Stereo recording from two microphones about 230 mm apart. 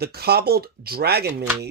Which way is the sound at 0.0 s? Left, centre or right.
Right.